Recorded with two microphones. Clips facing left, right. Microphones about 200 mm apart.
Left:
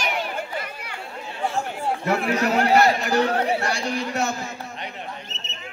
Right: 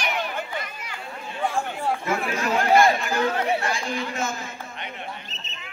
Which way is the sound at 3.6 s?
70° left (ahead or behind).